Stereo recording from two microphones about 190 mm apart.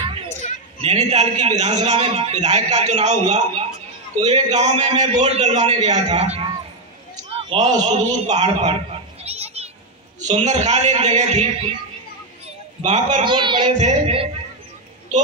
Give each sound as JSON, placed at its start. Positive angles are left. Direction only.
{"t": 0.4, "sound": "a sound", "side_deg": 40}
{"t": 0.7, "sound": "a man's voice", "side_deg": -35}
{"t": 7.2, "sound": "a sound", "side_deg": -30}
{"t": 7.7, "sound": "a man's voice", "side_deg": -40}
{"t": 9.2, "sound": "children playing", "side_deg": -35}
{"t": 10.2, "sound": "a man's voice", "side_deg": -35}
{"t": 12.8, "sound": "a man's voice", "side_deg": -40}
{"t": 13.2, "sound": "speech", "side_deg": -25}
{"t": 13.7, "sound": "a man's voice", "side_deg": -35}